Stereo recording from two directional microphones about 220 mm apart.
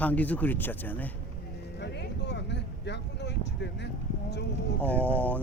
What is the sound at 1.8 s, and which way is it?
Vehicle, 50° left (ahead or behind).